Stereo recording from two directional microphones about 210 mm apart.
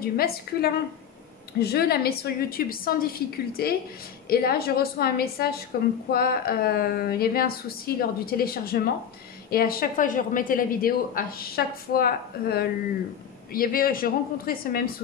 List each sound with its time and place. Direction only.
0.0 s a woman's voice: 45° left (ahead or behind)